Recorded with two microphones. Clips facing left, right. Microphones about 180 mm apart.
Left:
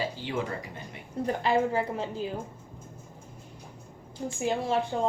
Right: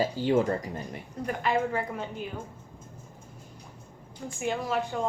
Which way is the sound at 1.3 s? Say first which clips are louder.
Left 2 dB; 30° left (ahead or behind).